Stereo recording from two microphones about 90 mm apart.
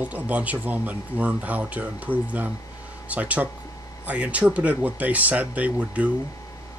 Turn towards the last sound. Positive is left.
turn(degrees=-15)  # may be behind; listen again after turning